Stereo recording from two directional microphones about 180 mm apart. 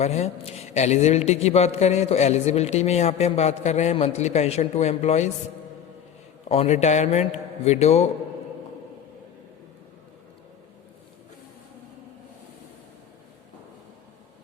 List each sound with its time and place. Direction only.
0.0 s a man's voice: 40° left (ahead or behind)
6.5 s a man's voice: 35° left (ahead or behind)